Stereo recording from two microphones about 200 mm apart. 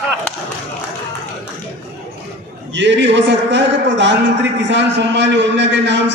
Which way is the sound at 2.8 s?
60° right (ahead or behind).